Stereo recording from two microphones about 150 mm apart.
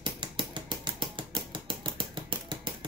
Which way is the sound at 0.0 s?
35° right (ahead or behind).